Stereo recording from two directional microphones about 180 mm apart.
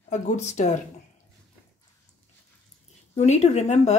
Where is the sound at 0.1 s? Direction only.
40° left (ahead or behind).